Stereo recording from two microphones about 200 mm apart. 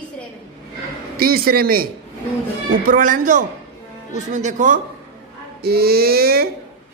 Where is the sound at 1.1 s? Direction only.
50° right (ahead or behind).